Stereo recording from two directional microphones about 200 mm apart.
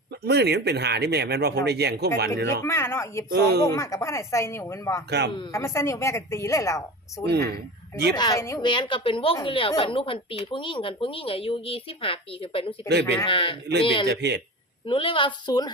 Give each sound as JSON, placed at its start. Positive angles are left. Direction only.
{"t": 0.3, "sound": "speech", "side_deg": -55}
{"t": 2.6, "sound": "a woman's voice", "side_deg": 15}
{"t": 3.3, "sound": "speech", "side_deg": -55}
{"t": 3.7, "sound": "a woman's voice", "side_deg": 15}
{"t": 7.3, "sound": "speech", "side_deg": -55}
{"t": 8.1, "sound": "a woman's voice", "side_deg": 20}
{"t": 14.1, "sound": "speech", "side_deg": -55}
{"t": 14.8, "sound": "a woman's voice", "side_deg": 25}